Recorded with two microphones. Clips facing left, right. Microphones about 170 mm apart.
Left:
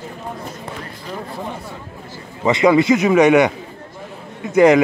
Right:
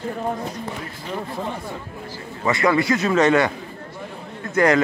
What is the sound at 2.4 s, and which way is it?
A man's voice, 20° left (ahead or behind).